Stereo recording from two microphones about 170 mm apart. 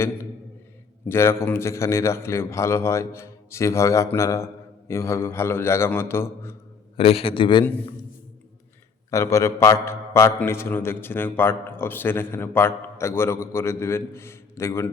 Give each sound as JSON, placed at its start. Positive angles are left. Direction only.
{"t": 1.0, "sound": "a man's voice", "side_deg": 15}
{"t": 6.9, "sound": "a man's voice", "side_deg": 35}
{"t": 9.0, "sound": "a man's voice", "side_deg": 15}